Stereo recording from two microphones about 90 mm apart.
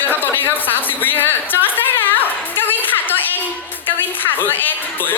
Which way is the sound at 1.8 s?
20° left (ahead or behind).